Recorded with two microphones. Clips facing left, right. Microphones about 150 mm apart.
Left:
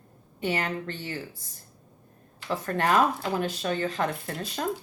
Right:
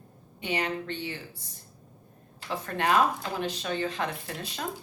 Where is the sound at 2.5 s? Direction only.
45° left (ahead or behind).